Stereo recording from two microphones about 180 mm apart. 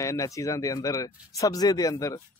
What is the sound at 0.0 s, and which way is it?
Speech, 15° left (ahead or behind).